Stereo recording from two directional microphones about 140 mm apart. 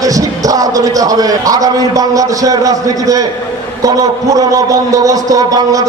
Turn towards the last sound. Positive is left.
turn(degrees=-25)  # may be behind; listen again after turning